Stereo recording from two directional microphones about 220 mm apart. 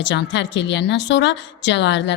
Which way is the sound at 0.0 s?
55° left (ahead or behind).